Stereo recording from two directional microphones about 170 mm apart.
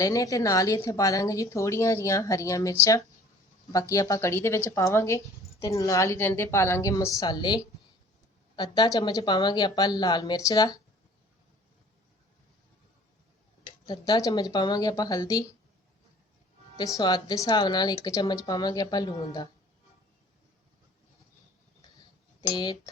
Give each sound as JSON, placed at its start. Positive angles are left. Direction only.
{"t": 0.0, "sound": "speech", "side_deg": 20}
{"t": 13.8, "sound": "speech", "side_deg": 25}
{"t": 16.7, "sound": "speech", "side_deg": 20}
{"t": 22.4, "sound": "speech", "side_deg": 25}